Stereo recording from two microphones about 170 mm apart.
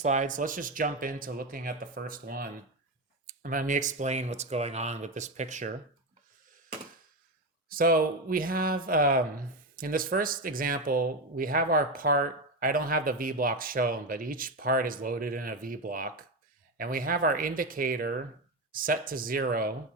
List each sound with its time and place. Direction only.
0.0 s speech: 45° right (ahead or behind)
7.7 s speech: 55° right (ahead or behind)